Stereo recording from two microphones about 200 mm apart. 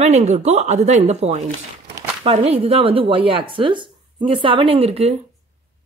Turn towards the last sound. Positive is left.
turn(degrees=-30)  # may be behind; listen again after turning